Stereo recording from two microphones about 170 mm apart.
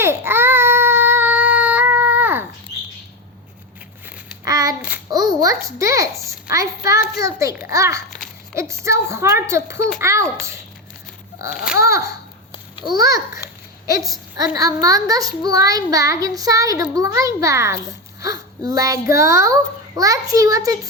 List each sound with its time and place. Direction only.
0.0 s baby cry: 15° right (ahead or behind)
4.4 s child singing: 20° right (ahead or behind)
5.4 s a sound: 20° right (ahead or behind)
7.2 s a child's voice: 20° right (ahead or behind)
11.8 s a child's voice: 20° right (ahead or behind)
13.3 s a child's voice: 20° right (ahead or behind)